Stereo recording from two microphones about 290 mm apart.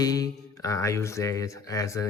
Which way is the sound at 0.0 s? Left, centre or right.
Centre.